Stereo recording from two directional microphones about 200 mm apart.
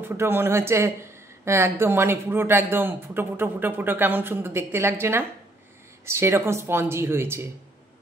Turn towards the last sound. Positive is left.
turn(degrees=-10)  # may be behind; listen again after turning